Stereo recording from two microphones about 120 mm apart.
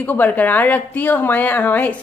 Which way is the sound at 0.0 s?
15° left (ahead or behind).